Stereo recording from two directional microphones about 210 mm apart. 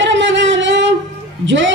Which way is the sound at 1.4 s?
60° right (ahead or behind).